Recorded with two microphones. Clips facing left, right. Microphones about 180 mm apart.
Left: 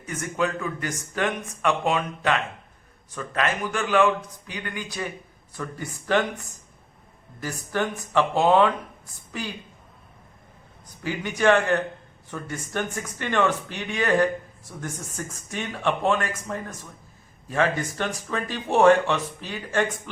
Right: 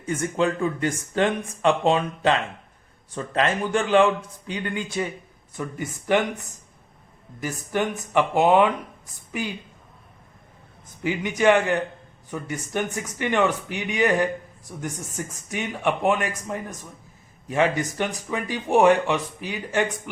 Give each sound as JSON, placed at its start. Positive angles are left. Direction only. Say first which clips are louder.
{"t": 0.0, "sound": "speech", "louder": "right 4 dB", "side_deg": -30}
{"t": 11.0, "sound": "speech", "louder": "right 2 dB", "side_deg": -20}